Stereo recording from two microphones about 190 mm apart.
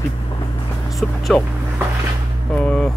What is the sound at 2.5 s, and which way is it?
Vehicle, 5° left (ahead or behind).